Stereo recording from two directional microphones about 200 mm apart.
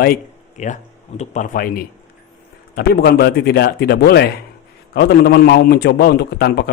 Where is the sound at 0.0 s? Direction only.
45° left (ahead or behind).